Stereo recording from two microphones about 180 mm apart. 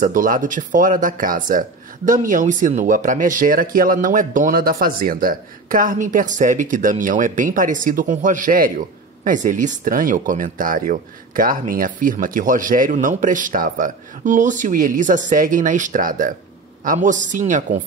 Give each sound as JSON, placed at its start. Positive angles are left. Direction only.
{"t": 0.0, "sound": "speech", "side_deg": -50}